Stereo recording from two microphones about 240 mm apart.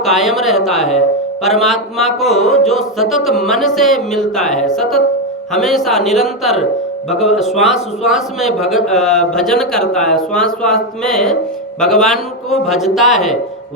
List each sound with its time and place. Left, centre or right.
0.0 s a man's voice: centre
7.1 s speech: left
7.6 s a man's voice: centre